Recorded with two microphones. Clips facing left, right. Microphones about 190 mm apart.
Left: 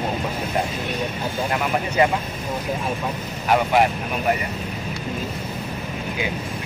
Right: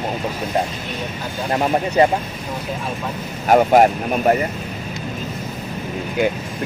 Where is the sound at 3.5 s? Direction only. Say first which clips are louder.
Right 6 dB; 45° right (ahead or behind).